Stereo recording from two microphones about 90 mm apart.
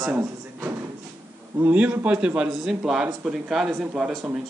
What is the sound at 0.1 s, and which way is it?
A man's voice, 15° right (ahead or behind).